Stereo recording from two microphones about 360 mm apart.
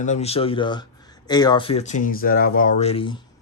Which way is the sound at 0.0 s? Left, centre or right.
Centre.